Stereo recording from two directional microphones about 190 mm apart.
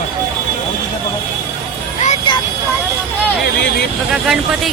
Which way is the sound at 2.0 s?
35° left (ahead or behind).